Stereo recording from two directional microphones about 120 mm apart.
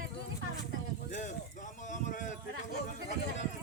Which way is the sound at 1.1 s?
90° left.